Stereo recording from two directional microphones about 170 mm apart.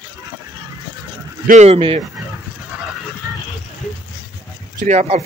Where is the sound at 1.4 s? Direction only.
45° right (ahead or behind).